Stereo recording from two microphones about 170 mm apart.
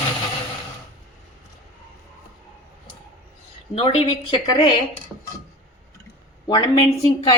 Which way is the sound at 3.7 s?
35° left (ahead or behind).